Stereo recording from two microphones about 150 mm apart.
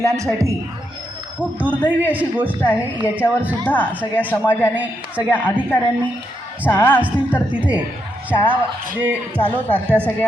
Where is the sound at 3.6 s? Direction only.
10° left (ahead or behind).